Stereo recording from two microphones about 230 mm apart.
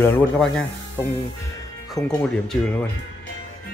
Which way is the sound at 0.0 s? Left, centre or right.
Centre.